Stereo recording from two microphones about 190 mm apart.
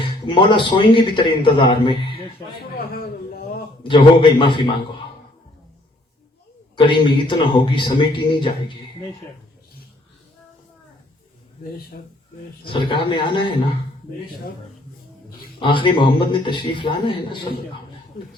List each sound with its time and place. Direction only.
0.3 s a man's voice: 25° left (ahead or behind)
2.6 s a man's voice: 55° left (ahead or behind)
3.8 s a man's voice: 25° left (ahead or behind)
6.7 s a man's voice: 25° left (ahead or behind)
12.6 s a man's voice: 25° left (ahead or behind)
15.5 s a man's voice: 25° left (ahead or behind)